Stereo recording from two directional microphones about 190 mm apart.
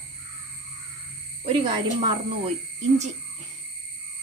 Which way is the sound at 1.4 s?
30° right (ahead or behind).